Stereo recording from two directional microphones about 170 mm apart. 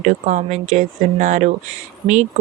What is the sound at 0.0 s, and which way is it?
Speech, 45° right (ahead or behind).